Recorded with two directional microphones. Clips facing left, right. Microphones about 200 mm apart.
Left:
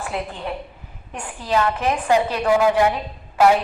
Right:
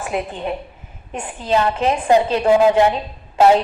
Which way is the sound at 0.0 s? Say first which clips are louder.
Right 4 dB; 20° right (ahead or behind).